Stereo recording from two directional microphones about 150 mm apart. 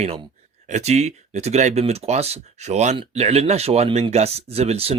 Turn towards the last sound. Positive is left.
turn(degrees=-40)  # may be behind; listen again after turning